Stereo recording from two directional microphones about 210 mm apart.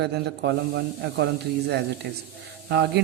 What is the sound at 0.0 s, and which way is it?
Speech, 50° right (ahead or behind).